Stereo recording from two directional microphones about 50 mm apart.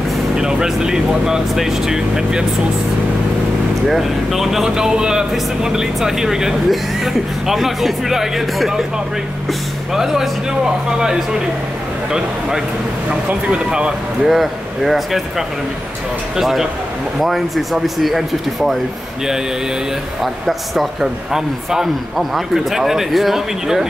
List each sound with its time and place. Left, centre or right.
0.4 s speech: centre
3.9 s speech: centre
9.9 s speech: centre
13.1 s speech: right
14.2 s speech: centre
20.4 s speech: centre
21.3 s speech: centre